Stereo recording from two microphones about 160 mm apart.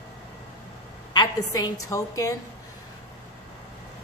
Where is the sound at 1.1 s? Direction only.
25° left (ahead or behind).